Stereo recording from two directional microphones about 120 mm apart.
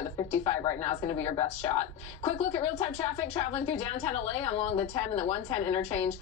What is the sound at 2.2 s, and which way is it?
A woman's voice, 55° left (ahead or behind).